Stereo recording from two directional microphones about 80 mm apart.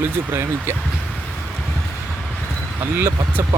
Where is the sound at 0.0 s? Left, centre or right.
Right.